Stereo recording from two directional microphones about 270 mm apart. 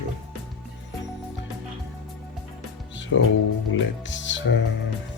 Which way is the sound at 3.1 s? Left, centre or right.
Left.